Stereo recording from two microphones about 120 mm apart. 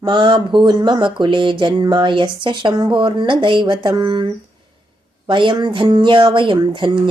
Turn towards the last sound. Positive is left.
turn(degrees=-40)  # may be behind; listen again after turning